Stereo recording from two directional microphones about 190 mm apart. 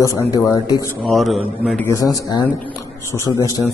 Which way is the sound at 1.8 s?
15° left (ahead or behind).